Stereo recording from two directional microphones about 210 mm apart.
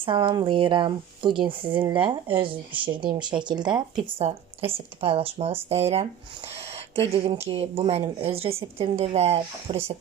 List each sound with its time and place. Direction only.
0.0 s a woman's voice: 25° right (ahead or behind)
7.1 s a woman's voice: 25° right (ahead or behind)